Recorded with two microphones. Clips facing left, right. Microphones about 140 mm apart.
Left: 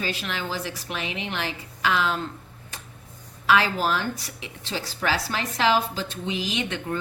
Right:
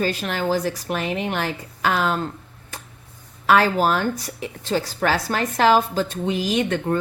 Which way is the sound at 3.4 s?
45° right (ahead or behind).